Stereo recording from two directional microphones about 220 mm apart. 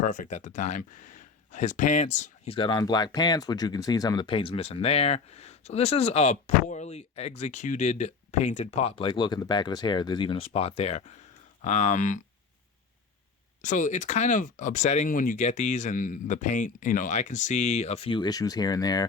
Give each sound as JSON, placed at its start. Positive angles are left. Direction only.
{"t": 0.0, "sound": "speech", "side_deg": 35}
{"t": 13.6, "sound": "speech", "side_deg": 35}